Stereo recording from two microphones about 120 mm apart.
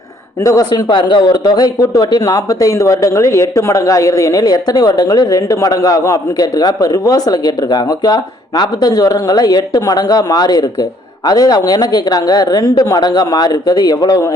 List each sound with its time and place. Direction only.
0.4 s speech: 30° left (ahead or behind)